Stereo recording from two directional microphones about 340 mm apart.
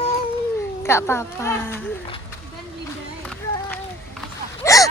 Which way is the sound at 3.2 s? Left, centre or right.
Centre.